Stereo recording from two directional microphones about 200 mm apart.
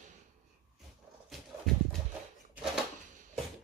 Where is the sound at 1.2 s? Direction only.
Centre (ahead or behind).